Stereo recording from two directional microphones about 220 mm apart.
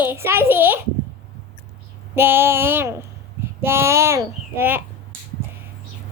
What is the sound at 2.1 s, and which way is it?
A child's voice, 10° right (ahead or behind).